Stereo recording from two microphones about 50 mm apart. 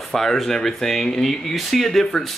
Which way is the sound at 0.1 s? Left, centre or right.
Centre.